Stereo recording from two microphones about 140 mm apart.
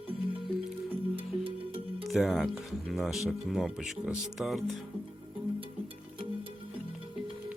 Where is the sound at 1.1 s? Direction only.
40° right (ahead or behind).